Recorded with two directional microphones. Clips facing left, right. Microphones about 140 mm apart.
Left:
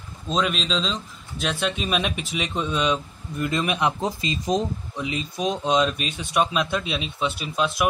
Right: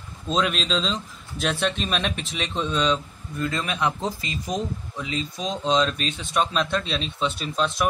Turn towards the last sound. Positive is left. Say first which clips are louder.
# even
turn(degrees=5)  # may be behind; listen again after turning